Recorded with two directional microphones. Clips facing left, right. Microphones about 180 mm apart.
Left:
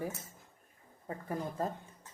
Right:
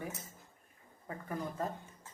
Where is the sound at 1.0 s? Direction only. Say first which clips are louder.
Left 2 dB; 30° left (ahead or behind).